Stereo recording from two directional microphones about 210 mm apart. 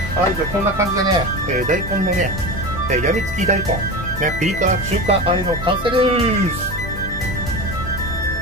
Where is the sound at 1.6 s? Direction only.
40° right (ahead or behind).